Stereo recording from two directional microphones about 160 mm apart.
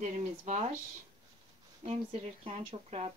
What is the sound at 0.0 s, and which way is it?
Speech, 45° right (ahead or behind).